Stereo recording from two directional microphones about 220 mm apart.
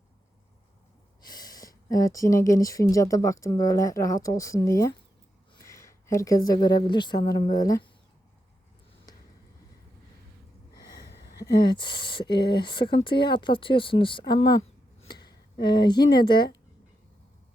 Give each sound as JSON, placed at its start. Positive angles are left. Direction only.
{"t": 1.2, "sound": "speech", "side_deg": 20}
{"t": 11.6, "sound": "speech", "side_deg": 20}